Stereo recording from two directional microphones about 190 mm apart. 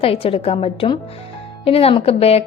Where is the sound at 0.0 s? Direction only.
30° left (ahead or behind).